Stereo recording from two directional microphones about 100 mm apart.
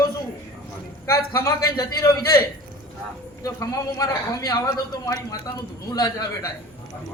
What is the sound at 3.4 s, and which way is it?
A man's voice, 35° left (ahead or behind).